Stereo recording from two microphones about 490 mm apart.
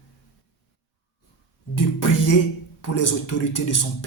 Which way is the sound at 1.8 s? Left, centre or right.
Left.